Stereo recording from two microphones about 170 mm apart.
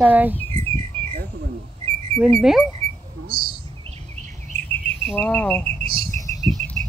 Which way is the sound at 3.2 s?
60° right (ahead or behind).